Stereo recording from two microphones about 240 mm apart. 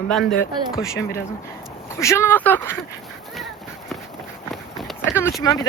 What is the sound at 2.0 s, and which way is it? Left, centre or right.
Speech, centre.